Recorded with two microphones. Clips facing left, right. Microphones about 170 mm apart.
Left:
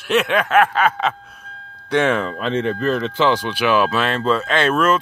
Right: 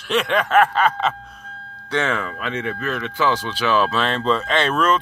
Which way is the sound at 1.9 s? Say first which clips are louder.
Left 5 dB; 15° left (ahead or behind).